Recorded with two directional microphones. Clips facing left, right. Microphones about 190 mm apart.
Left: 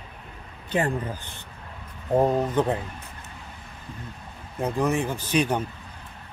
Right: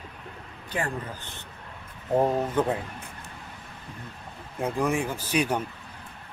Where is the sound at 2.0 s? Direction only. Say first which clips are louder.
Left 2 dB; 15° left (ahead or behind).